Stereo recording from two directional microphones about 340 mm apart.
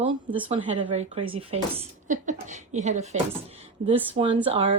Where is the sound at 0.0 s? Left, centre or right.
Centre.